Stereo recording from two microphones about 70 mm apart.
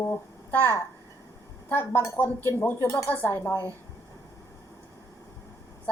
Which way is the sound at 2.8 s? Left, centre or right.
Left.